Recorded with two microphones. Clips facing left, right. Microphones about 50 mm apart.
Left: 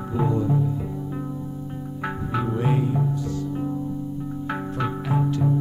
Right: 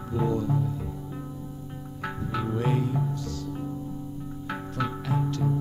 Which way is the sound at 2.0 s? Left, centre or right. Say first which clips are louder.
Left 4 dB; centre.